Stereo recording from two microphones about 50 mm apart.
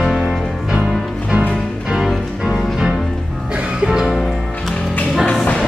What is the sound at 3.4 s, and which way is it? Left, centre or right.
Music, right.